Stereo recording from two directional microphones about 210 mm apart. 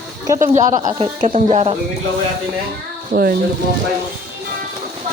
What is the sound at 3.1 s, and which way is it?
Speech, 45° right (ahead or behind).